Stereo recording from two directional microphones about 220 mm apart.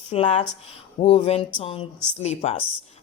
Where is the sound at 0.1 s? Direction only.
30° left (ahead or behind).